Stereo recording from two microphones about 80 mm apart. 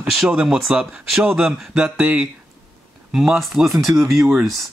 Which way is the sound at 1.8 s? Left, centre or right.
Right.